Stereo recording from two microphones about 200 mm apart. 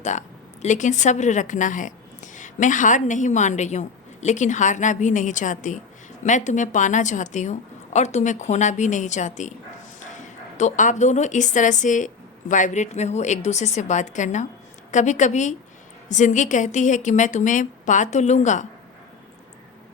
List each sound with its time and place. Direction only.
0.0 s a woman's voice: 35° left (ahead or behind)